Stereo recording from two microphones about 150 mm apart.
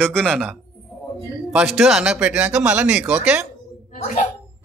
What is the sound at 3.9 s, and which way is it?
Speech, 50° left (ahead or behind).